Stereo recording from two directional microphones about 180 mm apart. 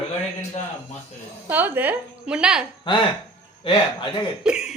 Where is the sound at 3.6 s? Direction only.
30° left (ahead or behind).